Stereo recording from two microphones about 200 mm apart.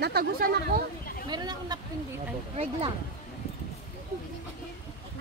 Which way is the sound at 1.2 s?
20° right (ahead or behind).